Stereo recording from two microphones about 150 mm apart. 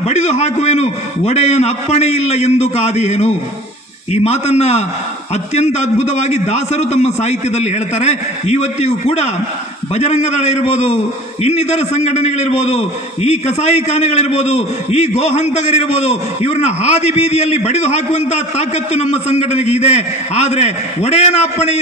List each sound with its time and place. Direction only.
0.1 s a man's voice: 50° left (ahead or behind)